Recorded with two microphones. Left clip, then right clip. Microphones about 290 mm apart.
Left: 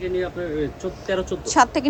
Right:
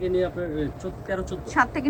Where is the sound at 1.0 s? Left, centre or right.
Centre.